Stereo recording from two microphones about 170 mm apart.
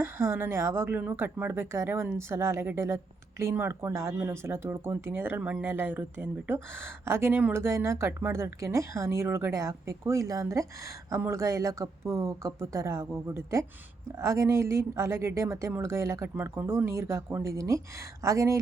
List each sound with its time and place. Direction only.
0.0 s speech: 15° right (ahead or behind)